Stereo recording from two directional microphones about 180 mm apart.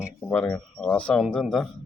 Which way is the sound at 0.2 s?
10° left (ahead or behind).